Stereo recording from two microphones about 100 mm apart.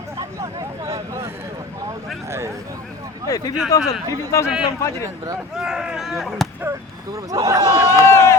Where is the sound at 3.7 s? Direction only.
35° left (ahead or behind).